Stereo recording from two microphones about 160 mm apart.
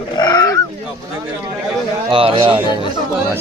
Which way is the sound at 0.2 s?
25° left (ahead or behind).